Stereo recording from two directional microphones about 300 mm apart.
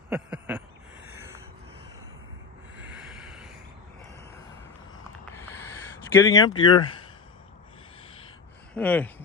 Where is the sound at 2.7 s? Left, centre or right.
Centre.